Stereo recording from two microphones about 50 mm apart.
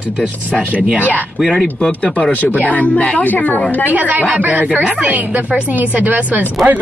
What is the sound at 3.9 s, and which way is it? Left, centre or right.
A woman's voice, right.